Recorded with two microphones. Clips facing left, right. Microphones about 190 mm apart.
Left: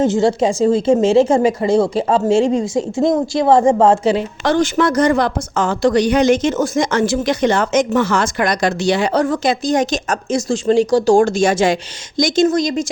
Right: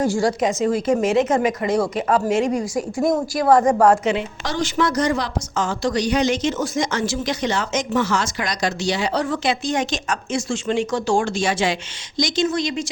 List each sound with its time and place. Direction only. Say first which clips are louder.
0.0 s a woman's voice: left 5 dB; 25° left (ahead or behind)
4.4 s a woman's voice: left 7 dB; 55° left (ahead or behind)